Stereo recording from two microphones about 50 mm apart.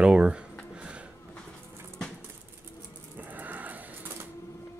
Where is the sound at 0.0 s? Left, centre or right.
Right.